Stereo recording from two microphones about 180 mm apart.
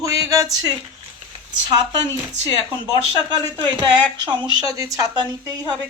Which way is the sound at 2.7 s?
25° right (ahead or behind).